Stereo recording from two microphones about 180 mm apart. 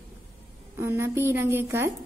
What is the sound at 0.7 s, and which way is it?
A woman's voice, 15° right (ahead or behind).